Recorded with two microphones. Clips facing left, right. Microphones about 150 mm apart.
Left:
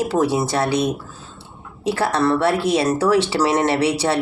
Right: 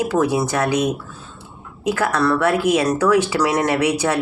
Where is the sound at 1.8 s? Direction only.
30° left (ahead or behind).